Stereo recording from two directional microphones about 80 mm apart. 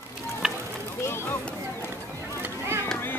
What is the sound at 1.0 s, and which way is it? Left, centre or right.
Speech, left.